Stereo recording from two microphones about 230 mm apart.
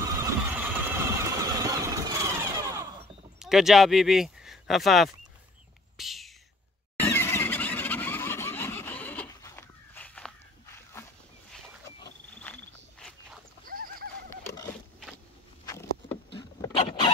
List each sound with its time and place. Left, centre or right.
0.0 s vehicle: centre
3.3 s speech: centre
5.9 s whispering: centre
7.0 s squeal: centre
12.5 s a sound: centre
13.7 s neigh: right
14.4 s a sound: centre
16.3 s vehicle: left